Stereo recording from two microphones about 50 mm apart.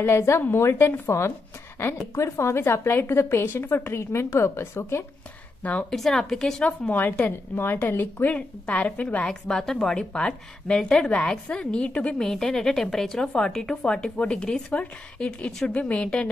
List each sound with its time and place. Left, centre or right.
0.6 s a woman's voice: left
1.0 s a woman's voice: left
5.6 s a woman's voice: left
5.9 s a woman's voice: centre
6.9 s a woman's voice: left
9.3 s a woman's voice: centre; by 12.2 s left
12.2 s a woman's voice: centre